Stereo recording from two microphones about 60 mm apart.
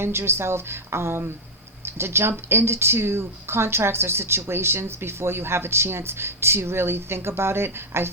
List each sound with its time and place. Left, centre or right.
0.0 s speech: right